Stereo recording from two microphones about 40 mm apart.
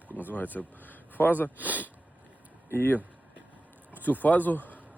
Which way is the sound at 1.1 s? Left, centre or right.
Left.